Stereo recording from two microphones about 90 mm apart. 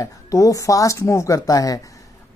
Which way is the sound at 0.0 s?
40° left (ahead or behind).